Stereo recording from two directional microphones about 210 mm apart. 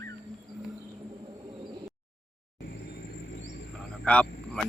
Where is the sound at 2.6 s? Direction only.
50° left (ahead or behind).